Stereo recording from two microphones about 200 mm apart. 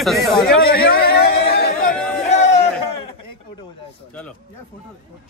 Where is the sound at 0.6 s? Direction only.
50° left (ahead or behind).